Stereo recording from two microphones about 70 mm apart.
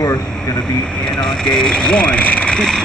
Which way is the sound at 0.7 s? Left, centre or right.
Centre.